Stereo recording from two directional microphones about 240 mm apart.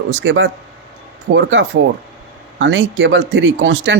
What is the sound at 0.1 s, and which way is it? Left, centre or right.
Speech, right.